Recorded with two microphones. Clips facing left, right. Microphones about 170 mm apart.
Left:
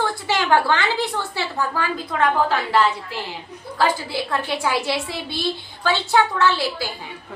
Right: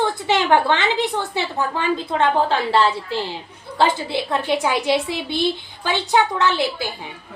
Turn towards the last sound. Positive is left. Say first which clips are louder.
# even
turn(degrees=-20)  # may be behind; listen again after turning